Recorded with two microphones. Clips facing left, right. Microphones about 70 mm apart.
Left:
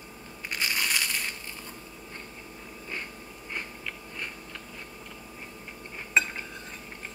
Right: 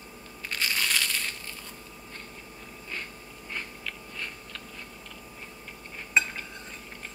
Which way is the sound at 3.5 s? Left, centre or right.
Centre.